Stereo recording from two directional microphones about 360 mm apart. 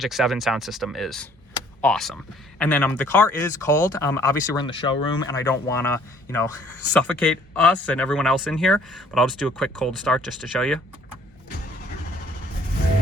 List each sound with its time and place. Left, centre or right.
0.0 s speech: centre
1.5 s tick-tock: centre
2.6 s speech: centre